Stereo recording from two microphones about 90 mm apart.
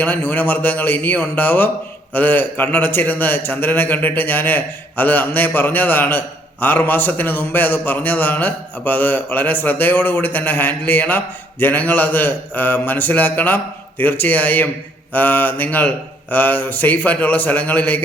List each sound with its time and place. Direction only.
0.0 s a man's voice: 20° left (ahead or behind)